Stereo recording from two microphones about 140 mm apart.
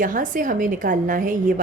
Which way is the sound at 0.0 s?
70° right (ahead or behind).